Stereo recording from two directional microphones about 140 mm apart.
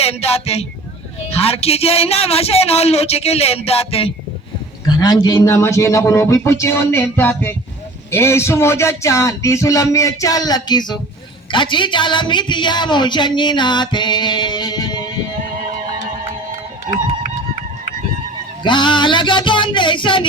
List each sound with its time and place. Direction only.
0.0 s a man's voice: 45° left (ahead or behind)
4.9 s a woman's voice: 30° left (ahead or behind)
18.6 s a woman's voice: 35° left (ahead or behind)